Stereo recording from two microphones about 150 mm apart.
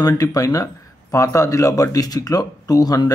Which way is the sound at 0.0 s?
25° left (ahead or behind).